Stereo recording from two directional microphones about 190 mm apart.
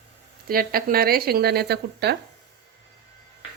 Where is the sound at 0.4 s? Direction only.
50° right (ahead or behind).